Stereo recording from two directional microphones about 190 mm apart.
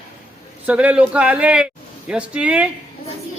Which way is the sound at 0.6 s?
5° right (ahead or behind).